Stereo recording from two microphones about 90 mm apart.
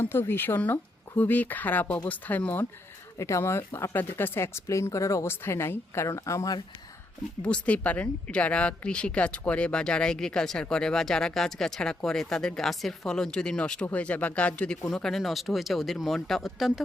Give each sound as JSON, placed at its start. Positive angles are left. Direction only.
{"t": 0.0, "sound": "speech", "side_deg": 25}
{"t": 3.2, "sound": "speech", "side_deg": 35}
{"t": 7.4, "sound": "speech", "side_deg": 15}